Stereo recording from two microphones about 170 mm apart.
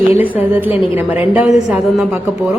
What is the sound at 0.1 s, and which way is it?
A woman's voice, 10° right (ahead or behind).